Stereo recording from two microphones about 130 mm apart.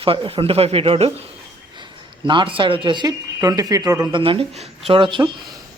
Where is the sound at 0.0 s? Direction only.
45° right (ahead or behind).